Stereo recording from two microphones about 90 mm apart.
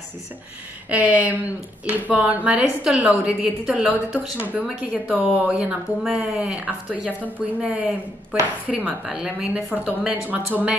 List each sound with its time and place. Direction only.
0.8 s speech: 15° right (ahead or behind)